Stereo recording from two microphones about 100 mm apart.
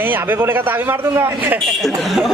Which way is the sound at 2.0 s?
Centre (ahead or behind).